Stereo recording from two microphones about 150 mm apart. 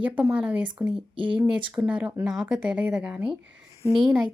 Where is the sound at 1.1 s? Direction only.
35° right (ahead or behind).